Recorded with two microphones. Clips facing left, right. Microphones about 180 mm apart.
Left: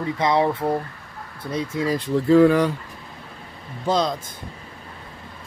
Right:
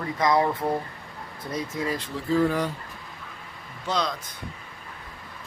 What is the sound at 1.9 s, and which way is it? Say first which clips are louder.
Speech: left 10 dB; 75° left (ahead or behind).